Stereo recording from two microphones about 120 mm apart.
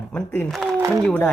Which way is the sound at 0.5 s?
Centre (ahead or behind).